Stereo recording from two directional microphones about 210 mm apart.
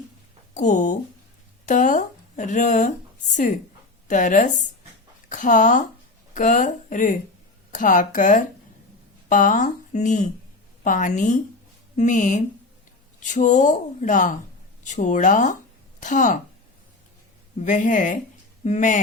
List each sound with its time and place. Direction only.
0.5 s a woman's voice: 35° left (ahead or behind)
17.7 s speech: 35° left (ahead or behind)